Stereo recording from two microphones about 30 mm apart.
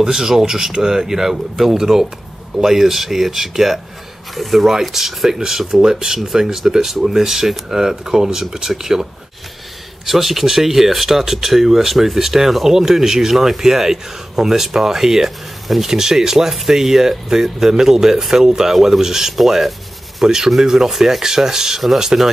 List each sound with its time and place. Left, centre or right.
0.0 s speech: centre
10.0 s speech: centre
19.3 s speech: centre
20.2 s speech: centre